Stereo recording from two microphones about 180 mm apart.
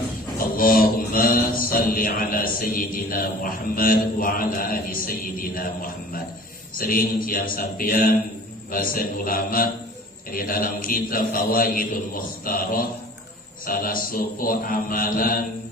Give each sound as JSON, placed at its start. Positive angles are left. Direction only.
{"t": 0.3, "sound": "mantra", "side_deg": 55}